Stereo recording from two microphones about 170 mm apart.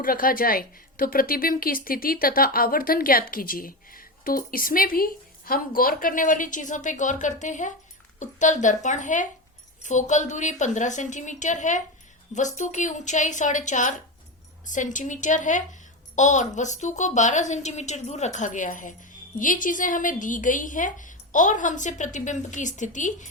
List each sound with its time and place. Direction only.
0.0 s a woman's voice: 55° left (ahead or behind)